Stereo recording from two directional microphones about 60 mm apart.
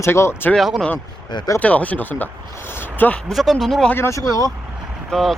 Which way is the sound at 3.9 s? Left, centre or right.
Left.